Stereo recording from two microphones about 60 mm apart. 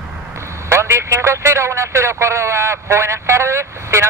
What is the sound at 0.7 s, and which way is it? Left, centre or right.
A man's voice, right.